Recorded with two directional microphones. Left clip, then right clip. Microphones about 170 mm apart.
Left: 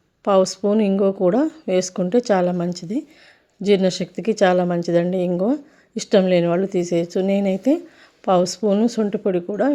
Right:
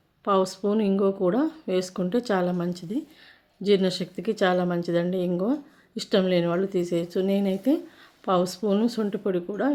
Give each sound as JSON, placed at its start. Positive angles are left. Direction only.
{"t": 0.3, "sound": "speech", "side_deg": 35}